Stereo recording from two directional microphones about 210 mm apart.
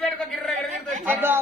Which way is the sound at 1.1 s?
10° right (ahead or behind).